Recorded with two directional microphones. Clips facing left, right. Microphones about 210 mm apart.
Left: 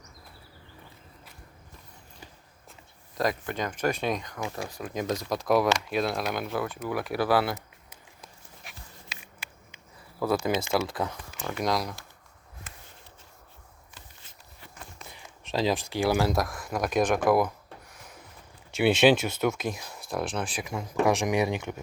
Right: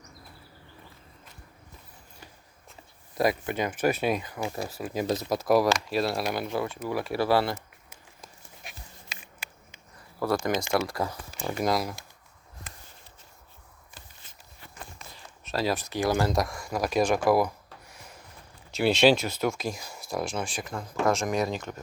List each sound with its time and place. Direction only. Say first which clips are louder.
3.2 s speech: right 3 dB; 10° right (ahead or behind)
9.1 s a sound: right 2 dB; 50° right (ahead or behind)
10.2 s speech: even; 10° left (ahead or behind)
15.0 s speech: left 1 dB; 15° left (ahead or behind); by 17.5 s 5° right (ahead or behind)
17.9 s a sound: even; centre (ahead or behind)
18.8 s speech: left 1 dB; 5° left (ahead or behind)